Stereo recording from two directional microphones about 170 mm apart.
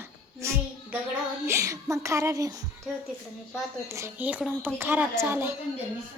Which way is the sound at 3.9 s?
15° right (ahead or behind).